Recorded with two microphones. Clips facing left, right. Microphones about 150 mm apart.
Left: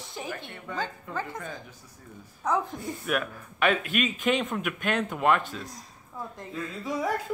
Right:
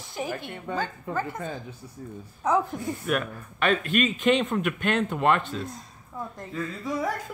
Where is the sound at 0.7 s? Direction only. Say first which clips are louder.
Right 4 dB; 30° right (ahead or behind).